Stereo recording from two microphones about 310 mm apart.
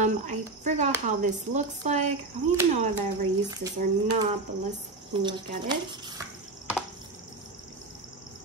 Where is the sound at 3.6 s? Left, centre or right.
Right.